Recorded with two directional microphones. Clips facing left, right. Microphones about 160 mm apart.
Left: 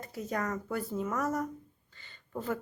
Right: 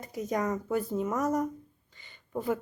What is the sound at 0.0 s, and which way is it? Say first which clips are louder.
A woman's voice: right 4 dB; 15° right (ahead or behind).